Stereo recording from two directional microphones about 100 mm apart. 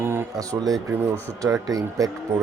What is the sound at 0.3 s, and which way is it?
Speech, 35° right (ahead or behind).